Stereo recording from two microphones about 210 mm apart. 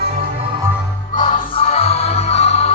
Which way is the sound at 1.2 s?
30° left (ahead or behind).